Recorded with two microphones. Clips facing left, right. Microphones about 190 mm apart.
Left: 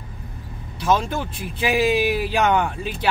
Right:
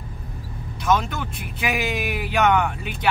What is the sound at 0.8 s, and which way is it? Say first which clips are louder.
Speech: left 1 dB; 30° left (ahead or behind).